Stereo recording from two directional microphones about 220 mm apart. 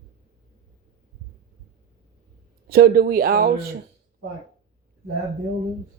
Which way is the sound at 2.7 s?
45° right (ahead or behind).